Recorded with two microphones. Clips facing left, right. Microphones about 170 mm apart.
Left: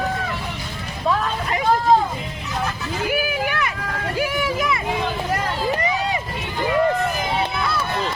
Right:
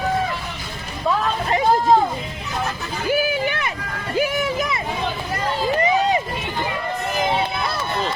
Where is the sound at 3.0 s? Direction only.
30° right (ahead or behind).